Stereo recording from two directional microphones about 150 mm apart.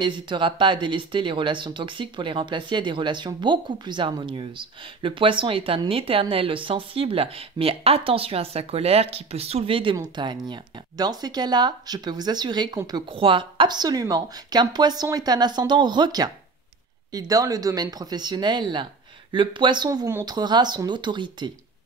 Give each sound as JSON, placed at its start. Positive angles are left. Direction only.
{"t": 0.0, "sound": "speech", "side_deg": -30}